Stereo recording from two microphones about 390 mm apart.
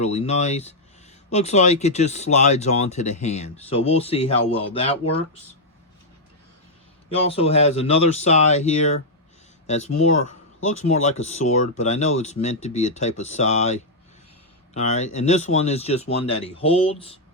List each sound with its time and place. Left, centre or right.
0.0 s speech: centre
7.1 s speech: centre